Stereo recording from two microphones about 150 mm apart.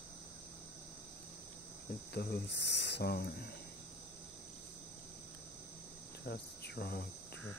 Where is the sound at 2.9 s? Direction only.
90° left.